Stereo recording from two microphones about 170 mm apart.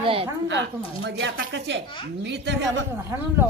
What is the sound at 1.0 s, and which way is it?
Speech, 90° right.